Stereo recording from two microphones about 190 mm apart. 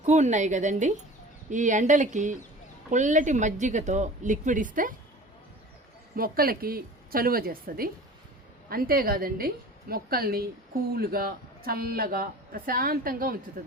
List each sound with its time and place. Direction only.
0.0 s speech: 40° right (ahead or behind)
6.1 s a man's voice: 50° right (ahead or behind)